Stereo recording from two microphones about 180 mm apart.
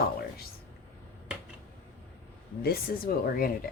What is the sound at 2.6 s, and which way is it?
Speech, 55° left (ahead or behind).